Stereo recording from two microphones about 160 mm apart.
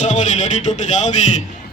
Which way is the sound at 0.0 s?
50° left (ahead or behind).